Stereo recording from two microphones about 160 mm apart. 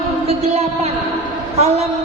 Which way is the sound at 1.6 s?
40° right (ahead or behind).